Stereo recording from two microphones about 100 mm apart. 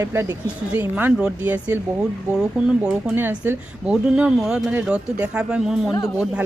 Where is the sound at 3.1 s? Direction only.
20° right (ahead or behind).